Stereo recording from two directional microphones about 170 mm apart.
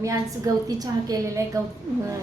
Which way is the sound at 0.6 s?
20° right (ahead or behind).